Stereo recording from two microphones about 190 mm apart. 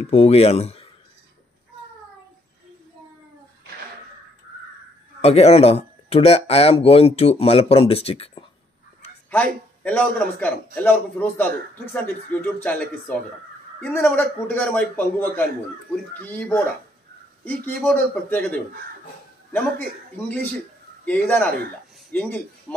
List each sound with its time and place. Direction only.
0.1 s speech: 35° left (ahead or behind)
5.2 s speech: 35° left (ahead or behind)
9.3 s a man's voice: 5° left (ahead or behind)
21.0 s a man's voice: 10° left (ahead or behind)